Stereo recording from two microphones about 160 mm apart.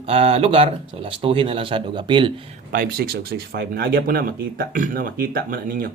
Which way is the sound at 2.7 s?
65° right (ahead or behind).